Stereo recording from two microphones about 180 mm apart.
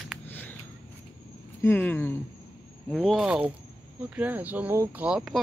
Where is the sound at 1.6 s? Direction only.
10° left (ahead or behind).